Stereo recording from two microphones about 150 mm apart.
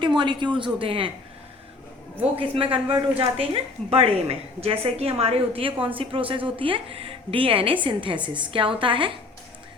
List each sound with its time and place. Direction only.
0.2 s a woman's voice: 30° right (ahead or behind)
2.3 s a woman's voice: 35° right (ahead or behind)